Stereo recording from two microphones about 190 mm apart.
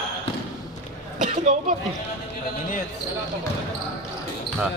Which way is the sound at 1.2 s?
35° right (ahead or behind).